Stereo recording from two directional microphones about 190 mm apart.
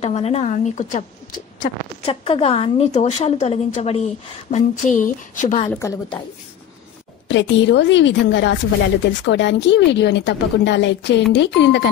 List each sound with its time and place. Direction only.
0.0 s a woman's voice: 35° left (ahead or behind)
2.0 s a woman's voice: 30° left (ahead or behind)
5.7 s a woman's voice: 15° left (ahead or behind)
7.2 s a woman's voice: 70° left (ahead or behind)